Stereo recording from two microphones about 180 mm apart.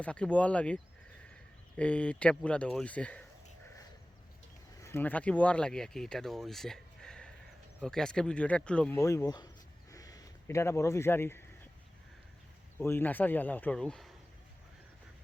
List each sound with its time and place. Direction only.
0.0 s speech: 5° left (ahead or behind)
4.8 s speech: 15° left (ahead or behind)
9.0 s speech: 15° left (ahead or behind)
9.9 s a sound: 20° left (ahead or behind)
12.8 s speech: 10° left (ahead or behind)